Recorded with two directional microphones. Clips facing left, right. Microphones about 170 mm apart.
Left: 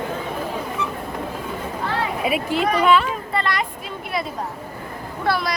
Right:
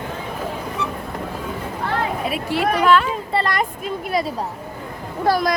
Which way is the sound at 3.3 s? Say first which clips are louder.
Right 3 dB; 45° right (ahead or behind).